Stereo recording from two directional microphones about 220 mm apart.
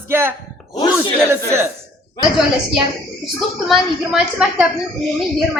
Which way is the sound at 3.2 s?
Centre (ahead or behind).